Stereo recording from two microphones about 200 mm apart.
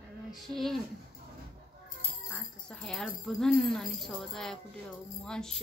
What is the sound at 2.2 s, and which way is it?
Speech, 5° left (ahead or behind).